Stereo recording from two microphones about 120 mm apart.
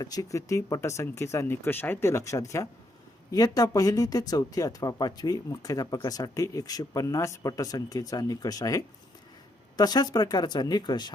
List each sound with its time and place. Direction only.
0.0 s speech: 30° left (ahead or behind)